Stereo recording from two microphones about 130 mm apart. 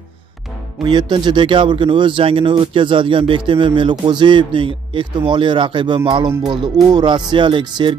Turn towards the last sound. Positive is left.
turn(degrees=-40)  # may be behind; listen again after turning